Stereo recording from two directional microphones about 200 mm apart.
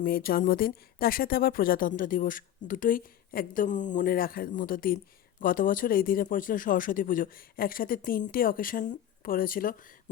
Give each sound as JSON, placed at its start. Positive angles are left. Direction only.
{"t": 0.0, "sound": "speech", "side_deg": 45}